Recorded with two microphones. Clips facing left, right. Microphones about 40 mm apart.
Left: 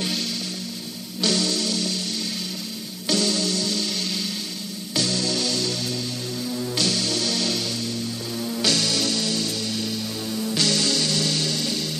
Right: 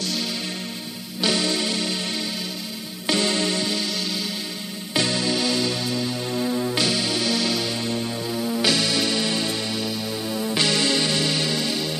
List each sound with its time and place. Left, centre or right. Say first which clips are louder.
1.2 s music: right 1 dB; right
3.1 s music: right 1 dB; right
4.9 s music: right 2 dB; right
6.3 s music: right 6 dB; right
6.7 s music: right 2 dB; centre